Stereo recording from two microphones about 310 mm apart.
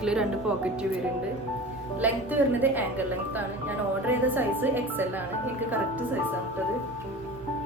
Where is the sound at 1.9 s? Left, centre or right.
Centre.